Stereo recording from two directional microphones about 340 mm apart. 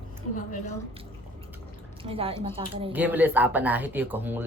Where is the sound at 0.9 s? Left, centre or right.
Centre.